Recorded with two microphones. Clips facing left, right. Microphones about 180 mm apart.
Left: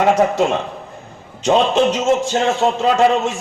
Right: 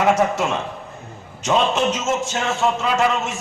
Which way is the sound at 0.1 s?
30° left (ahead or behind).